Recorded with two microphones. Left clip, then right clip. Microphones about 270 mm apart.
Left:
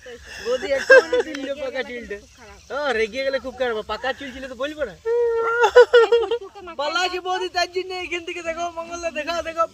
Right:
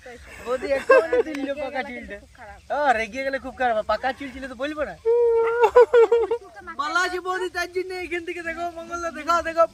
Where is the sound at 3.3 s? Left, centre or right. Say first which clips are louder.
Right 1 dB; right.